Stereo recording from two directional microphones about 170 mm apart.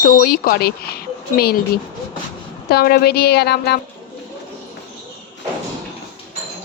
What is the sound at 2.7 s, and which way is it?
Speech, 65° left (ahead or behind).